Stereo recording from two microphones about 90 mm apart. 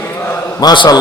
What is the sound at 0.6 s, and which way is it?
Speech, 50° left (ahead or behind).